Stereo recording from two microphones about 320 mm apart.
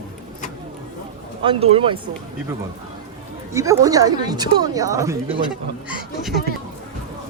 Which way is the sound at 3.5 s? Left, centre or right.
Centre.